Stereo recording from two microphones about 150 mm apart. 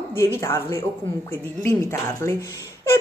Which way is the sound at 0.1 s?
15° left (ahead or behind).